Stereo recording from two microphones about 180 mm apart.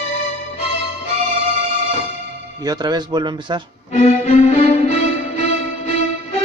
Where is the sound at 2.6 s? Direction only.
20° right (ahead or behind).